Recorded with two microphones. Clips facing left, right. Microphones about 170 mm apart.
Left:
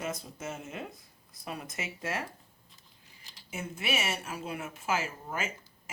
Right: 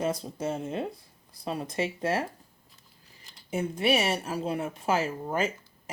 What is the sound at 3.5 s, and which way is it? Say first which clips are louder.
Speech: right 9 dB; 35° right (ahead or behind).